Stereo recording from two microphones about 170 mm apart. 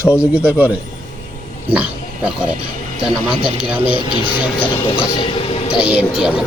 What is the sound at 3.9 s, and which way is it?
Speech, 30° left (ahead or behind).